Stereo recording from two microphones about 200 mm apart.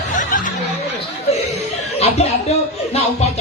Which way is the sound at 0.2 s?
40° left (ahead or behind).